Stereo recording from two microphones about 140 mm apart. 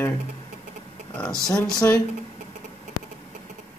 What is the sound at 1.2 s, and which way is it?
Speech, 5° left (ahead or behind).